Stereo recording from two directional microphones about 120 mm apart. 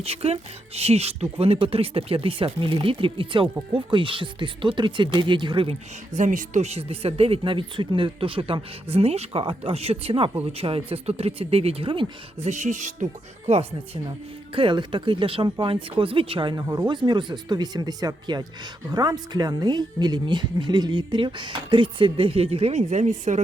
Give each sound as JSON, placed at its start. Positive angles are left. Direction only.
{"t": 0.0, "sound": "speech", "side_deg": -55}
{"t": 6.1, "sound": "speech", "side_deg": -90}
{"t": 12.4, "sound": "music", "side_deg": -75}
{"t": 13.5, "sound": "speech", "side_deg": -60}
{"t": 14.5, "sound": "speech", "side_deg": -45}
{"t": 15.7, "sound": "speech", "side_deg": -50}